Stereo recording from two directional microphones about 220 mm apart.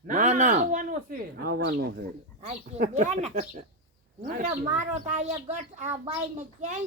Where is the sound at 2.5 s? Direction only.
30° right (ahead or behind).